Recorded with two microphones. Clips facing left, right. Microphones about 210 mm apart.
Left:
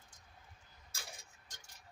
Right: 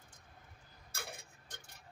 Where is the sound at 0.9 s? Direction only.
60° right (ahead or behind).